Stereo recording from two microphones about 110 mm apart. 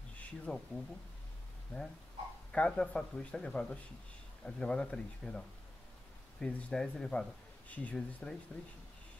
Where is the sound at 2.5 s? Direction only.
10° left (ahead or behind).